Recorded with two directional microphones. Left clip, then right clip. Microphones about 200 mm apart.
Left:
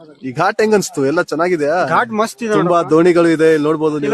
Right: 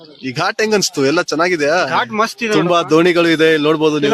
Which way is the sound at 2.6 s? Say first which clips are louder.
Left 1 dB; centre (ahead or behind).